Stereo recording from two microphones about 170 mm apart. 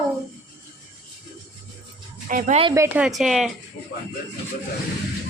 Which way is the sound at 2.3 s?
55° right (ahead or behind).